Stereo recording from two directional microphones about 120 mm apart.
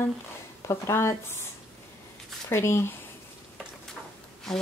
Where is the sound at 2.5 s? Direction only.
20° left (ahead or behind).